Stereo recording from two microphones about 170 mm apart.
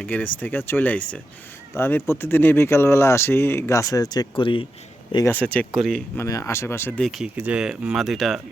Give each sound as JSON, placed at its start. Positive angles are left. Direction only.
{"t": 0.0, "sound": "speech", "side_deg": 10}
{"t": 5.5, "sound": "speech", "side_deg": 5}
{"t": 6.1, "sound": "speech", "side_deg": 15}